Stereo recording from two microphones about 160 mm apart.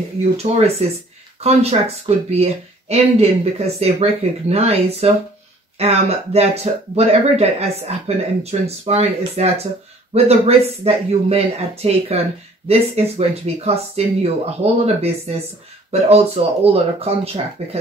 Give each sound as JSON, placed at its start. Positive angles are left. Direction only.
{"t": 0.2, "sound": "speech", "side_deg": -40}